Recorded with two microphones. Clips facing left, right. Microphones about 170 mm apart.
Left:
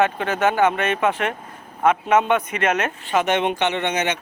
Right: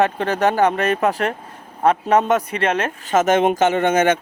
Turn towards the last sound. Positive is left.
turn(degrees=-50)  # may be behind; listen again after turning